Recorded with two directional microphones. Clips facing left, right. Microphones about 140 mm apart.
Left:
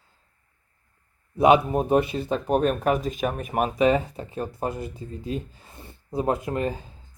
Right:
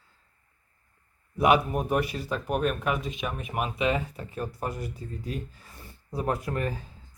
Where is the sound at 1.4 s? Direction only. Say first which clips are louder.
Left 5 dB; 25° left (ahead or behind).